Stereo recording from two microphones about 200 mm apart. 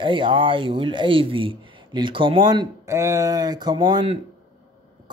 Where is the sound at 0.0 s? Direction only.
25° right (ahead or behind).